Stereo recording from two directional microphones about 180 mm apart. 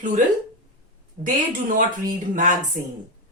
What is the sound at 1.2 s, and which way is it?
Speech, 50° right (ahead or behind).